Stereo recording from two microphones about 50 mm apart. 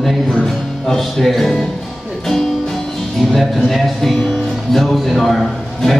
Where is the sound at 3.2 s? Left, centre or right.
Centre.